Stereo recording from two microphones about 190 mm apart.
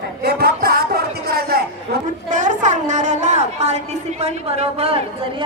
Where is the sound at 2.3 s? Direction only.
40° right (ahead or behind).